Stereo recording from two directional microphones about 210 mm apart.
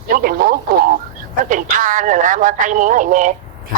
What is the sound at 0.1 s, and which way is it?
Speech, 45° right (ahead or behind).